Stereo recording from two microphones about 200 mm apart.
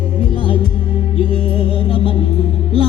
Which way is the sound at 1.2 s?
25° left (ahead or behind).